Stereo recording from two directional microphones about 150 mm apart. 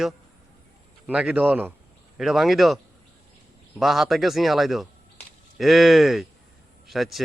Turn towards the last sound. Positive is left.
turn(degrees=0)  # may be behind; listen again after turning